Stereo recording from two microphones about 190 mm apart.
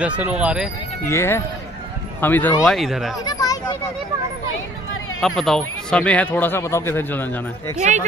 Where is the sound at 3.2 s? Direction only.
20° left (ahead or behind).